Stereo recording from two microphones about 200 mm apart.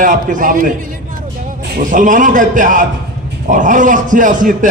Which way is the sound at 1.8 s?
40° right (ahead or behind).